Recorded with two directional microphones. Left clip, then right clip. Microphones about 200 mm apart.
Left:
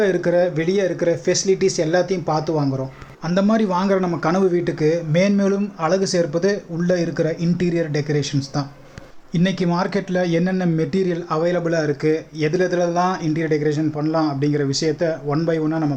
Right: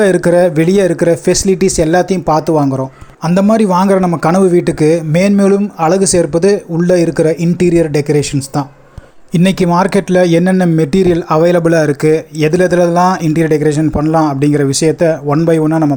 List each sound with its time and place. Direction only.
0.0 s speech: 50° right (ahead or behind)
3.2 s speech: 35° right (ahead or behind)